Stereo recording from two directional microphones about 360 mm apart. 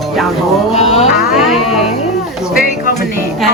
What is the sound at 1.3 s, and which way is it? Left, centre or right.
Music, centre.